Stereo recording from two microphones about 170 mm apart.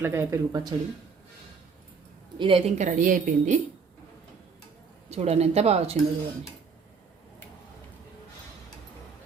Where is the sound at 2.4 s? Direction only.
30° right (ahead or behind); by 3.5 s 50° right (ahead or behind).